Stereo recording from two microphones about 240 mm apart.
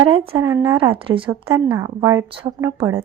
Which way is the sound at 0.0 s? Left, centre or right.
Right.